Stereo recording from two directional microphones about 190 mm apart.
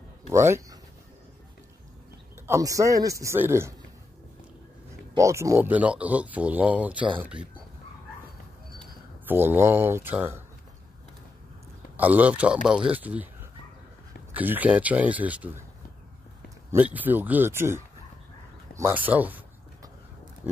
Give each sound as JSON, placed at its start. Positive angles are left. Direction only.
{"t": 0.3, "sound": "speech", "side_deg": -15}
{"t": 2.4, "sound": "speech", "side_deg": -15}
{"t": 5.1, "sound": "speech", "side_deg": -15}
{"t": 9.3, "sound": "speech", "side_deg": -10}
{"t": 12.0, "sound": "speech", "side_deg": -10}
{"t": 16.7, "sound": "speech", "side_deg": -10}
{"t": 18.8, "sound": "a sound", "side_deg": -10}